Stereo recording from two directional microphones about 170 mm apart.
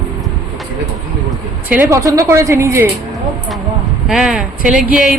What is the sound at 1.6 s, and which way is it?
A woman's voice, 10° right (ahead or behind).